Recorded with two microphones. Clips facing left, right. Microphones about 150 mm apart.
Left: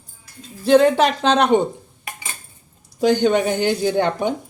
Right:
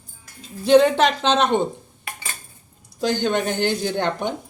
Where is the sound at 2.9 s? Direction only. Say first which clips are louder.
Left 5 dB; 15° left (ahead or behind).